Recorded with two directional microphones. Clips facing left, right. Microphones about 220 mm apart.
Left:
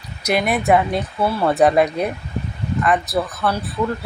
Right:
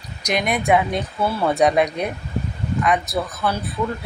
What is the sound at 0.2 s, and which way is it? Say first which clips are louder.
Speech: left 3 dB; 5° left (ahead or behind).